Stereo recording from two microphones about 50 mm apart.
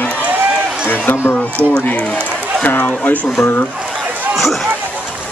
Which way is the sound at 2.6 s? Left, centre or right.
Left.